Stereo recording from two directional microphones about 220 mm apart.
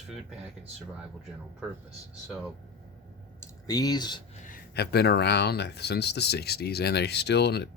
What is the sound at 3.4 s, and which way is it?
Speech, 15° left (ahead or behind).